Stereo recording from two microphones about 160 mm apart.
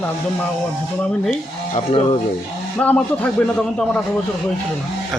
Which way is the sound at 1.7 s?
40° left (ahead or behind).